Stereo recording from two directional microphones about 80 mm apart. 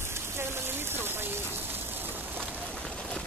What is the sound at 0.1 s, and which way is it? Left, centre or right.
Rain on surface, right.